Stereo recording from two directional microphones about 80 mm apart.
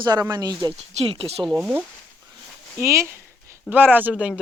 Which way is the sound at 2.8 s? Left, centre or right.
Right.